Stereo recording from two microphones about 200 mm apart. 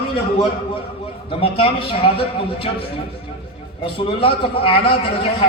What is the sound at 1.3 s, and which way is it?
A man's voice, 30° left (ahead or behind).